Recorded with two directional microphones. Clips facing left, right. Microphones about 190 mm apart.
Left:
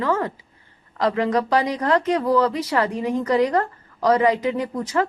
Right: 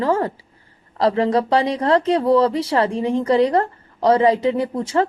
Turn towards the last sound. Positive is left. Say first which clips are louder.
# right 3 dB
turn(degrees=-30)  # may be behind; listen again after turning